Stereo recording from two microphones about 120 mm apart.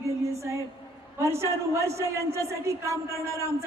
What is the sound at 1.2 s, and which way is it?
A man's voice, 25° right (ahead or behind).